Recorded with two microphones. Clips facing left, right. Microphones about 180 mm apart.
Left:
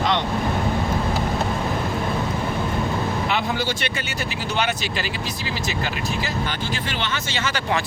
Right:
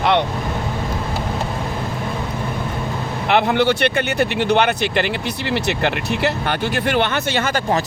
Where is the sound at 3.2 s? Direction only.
65° right (ahead or behind).